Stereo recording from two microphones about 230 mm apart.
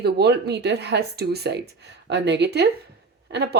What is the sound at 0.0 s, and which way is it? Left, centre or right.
A woman's voice, right.